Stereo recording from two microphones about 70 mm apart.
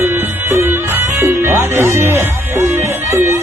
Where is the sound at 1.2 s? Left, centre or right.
Right.